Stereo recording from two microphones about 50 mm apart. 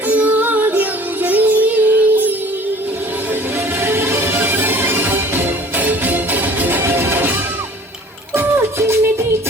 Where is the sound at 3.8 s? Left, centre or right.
Right.